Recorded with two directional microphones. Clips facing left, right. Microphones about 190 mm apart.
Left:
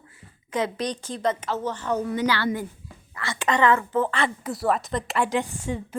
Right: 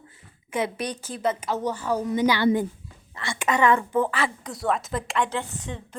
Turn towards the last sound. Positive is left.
turn(degrees=10)  # may be behind; listen again after turning